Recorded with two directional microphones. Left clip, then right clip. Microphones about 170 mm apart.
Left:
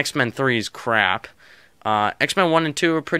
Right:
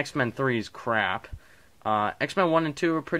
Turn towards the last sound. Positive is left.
turn(degrees=30)  # may be behind; listen again after turning